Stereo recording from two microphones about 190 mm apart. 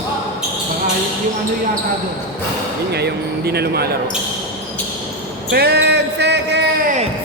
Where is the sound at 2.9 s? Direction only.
60° right (ahead or behind).